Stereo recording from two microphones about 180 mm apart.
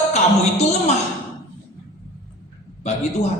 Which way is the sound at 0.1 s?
40° left (ahead or behind).